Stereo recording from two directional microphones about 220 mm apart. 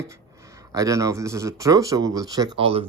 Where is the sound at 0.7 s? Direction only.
15° right (ahead or behind).